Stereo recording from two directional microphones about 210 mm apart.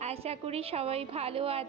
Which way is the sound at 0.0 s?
30° right (ahead or behind).